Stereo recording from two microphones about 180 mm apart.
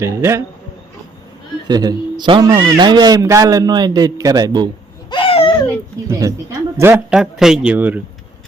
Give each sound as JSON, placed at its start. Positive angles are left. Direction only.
{"t": 0.0, "sound": "speech", "side_deg": -15}
{"t": 1.6, "sound": "a man's voice", "side_deg": -20}
{"t": 5.1, "sound": "a sound", "side_deg": 30}
{"t": 6.1, "sound": "speech", "side_deg": -20}
{"t": 7.1, "sound": "speech", "side_deg": -5}